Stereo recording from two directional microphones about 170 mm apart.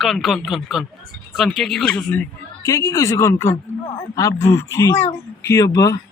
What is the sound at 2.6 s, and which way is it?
A woman's voice, 20° left (ahead or behind).